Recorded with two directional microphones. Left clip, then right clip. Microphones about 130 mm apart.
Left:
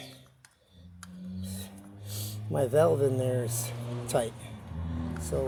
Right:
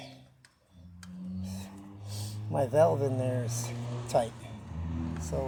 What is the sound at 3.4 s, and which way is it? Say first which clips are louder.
Speech: left 2 dB; 55° left (ahead or behind).